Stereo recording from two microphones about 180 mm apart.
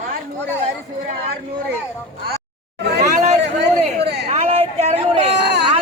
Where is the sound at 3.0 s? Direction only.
40° right (ahead or behind).